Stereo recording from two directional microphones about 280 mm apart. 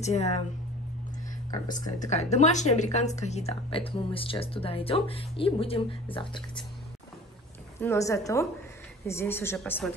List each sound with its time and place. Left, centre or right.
0.0 s a woman's voice: left
1.7 s a woman's voice: left
7.8 s a woman's voice: centre